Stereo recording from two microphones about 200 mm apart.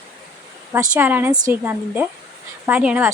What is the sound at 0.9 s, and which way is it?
A woman's voice, 10° right (ahead or behind).